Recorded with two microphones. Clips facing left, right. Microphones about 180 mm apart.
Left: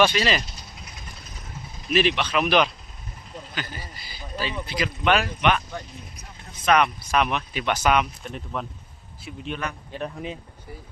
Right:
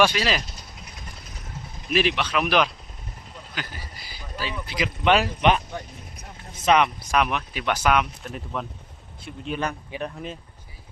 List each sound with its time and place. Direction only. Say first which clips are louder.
0.0 s speech: left 1 dB; 5° right (ahead or behind)
1.9 s speech: left 1 dB; 5° right (ahead or behind)
4.4 s speech: left 1 dB; 5° right (ahead or behind)
5.0 s speech: right 2 dB; 30° right (ahead or behind)
6.7 s speech: right 1 dB; 20° right (ahead or behind)
7.1 s speech: even; 5° right (ahead or behind)